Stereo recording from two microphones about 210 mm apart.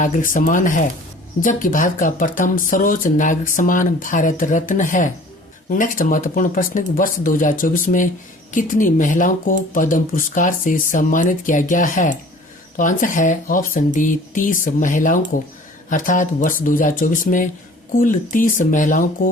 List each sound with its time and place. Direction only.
0.0 s speech: 40° left (ahead or behind)